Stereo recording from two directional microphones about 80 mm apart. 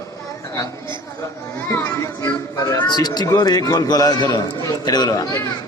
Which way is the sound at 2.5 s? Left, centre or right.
Left.